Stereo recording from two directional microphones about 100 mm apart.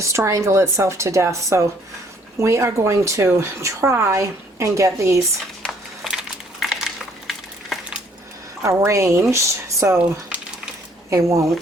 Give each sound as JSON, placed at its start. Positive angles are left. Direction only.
{"t": 0.0, "sound": "speech", "side_deg": -30}
{"t": 6.6, "sound": "a sound", "side_deg": -5}
{"t": 8.6, "sound": "speech", "side_deg": -30}
{"t": 11.1, "sound": "a woman's voice", "side_deg": -30}